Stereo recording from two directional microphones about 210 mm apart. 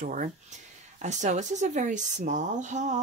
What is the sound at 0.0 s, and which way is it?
A woman's voice, 40° right (ahead or behind).